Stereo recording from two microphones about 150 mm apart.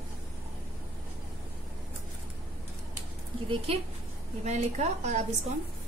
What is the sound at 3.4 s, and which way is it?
A woman's voice, 40° right (ahead or behind).